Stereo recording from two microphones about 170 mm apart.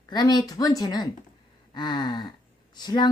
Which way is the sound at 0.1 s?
25° left (ahead or behind).